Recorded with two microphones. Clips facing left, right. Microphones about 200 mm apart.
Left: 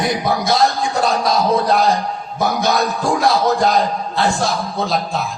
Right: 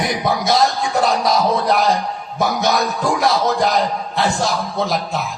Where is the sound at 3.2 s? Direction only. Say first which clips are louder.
Left 2 dB; 20° right (ahead or behind).